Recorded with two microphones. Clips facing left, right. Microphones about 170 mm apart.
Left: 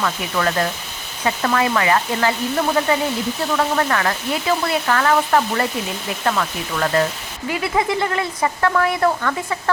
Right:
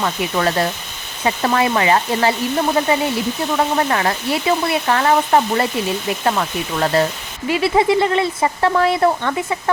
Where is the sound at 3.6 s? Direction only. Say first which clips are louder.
Right 2 dB; 25° right (ahead or behind).